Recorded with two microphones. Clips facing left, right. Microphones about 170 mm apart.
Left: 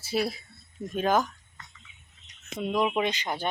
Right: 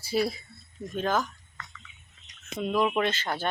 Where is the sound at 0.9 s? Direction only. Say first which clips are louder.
Left 3 dB; 15° left (ahead or behind).